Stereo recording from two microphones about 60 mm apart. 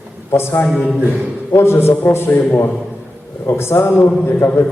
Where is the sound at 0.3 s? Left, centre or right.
Left.